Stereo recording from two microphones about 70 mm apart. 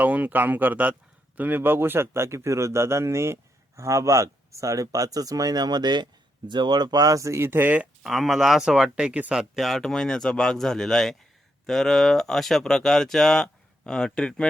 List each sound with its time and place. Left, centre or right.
0.0 s a man's voice: right
7.4 s speech: right
8.0 s speech: centre